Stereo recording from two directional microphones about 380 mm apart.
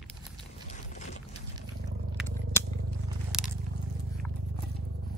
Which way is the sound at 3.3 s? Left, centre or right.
Centre.